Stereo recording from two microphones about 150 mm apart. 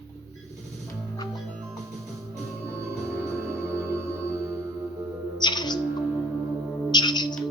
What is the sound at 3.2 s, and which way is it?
Music, 20° right (ahead or behind).